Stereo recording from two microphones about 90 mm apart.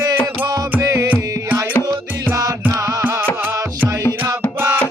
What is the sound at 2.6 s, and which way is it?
Music, 25° right (ahead or behind).